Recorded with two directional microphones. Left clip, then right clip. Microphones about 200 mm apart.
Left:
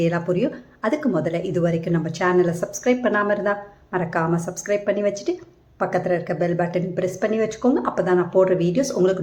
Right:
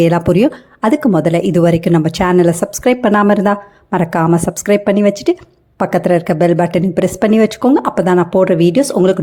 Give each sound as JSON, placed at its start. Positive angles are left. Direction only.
{"t": 0.0, "sound": "a woman's voice", "side_deg": -50}